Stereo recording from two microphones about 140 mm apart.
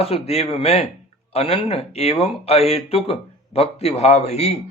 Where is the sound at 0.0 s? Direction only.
45° left (ahead or behind).